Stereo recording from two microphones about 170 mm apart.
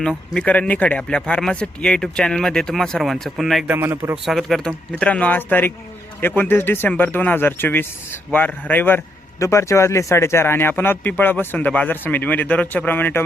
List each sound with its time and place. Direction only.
0.0 s speech: 5° left (ahead or behind)
3.8 s speech: 15° right (ahead or behind)
4.3 s speech: centre (ahead or behind)